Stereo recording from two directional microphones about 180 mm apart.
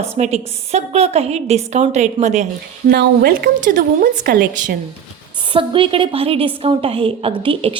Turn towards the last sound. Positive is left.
turn(degrees=-30)  # may be behind; listen again after turning